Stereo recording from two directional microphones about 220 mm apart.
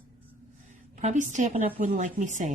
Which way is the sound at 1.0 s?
30° right (ahead or behind).